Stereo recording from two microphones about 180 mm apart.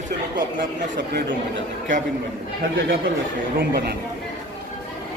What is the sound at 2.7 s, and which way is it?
Speech, 55° right (ahead or behind).